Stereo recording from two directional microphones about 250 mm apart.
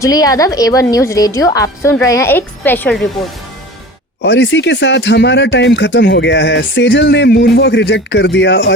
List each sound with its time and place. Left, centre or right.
0.0 s a woman's voice: centre
4.2 s speech: left